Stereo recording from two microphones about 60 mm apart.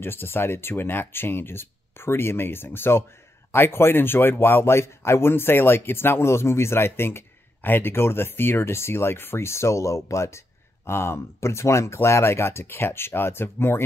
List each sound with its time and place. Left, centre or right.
0.0 s speech: left